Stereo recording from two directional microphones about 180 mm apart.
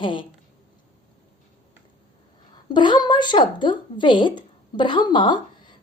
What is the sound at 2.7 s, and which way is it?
A woman's voice, 25° left (ahead or behind).